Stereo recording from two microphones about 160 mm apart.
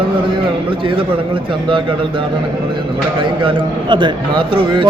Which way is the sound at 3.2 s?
30° right (ahead or behind).